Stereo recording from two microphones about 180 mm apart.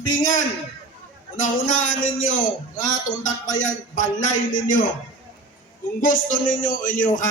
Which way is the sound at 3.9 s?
45° left (ahead or behind).